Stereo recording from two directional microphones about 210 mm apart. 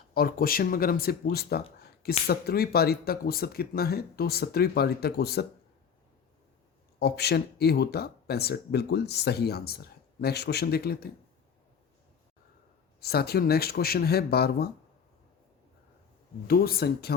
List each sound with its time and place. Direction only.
0.1 s speech: 45° left (ahead or behind)
7.0 s speech: 50° left (ahead or behind)
13.0 s speech: 50° left (ahead or behind)
16.5 s speech: 45° left (ahead or behind)